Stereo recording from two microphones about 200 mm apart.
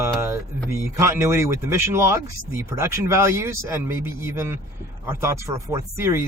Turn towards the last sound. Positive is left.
turn(degrees=-15)  # may be behind; listen again after turning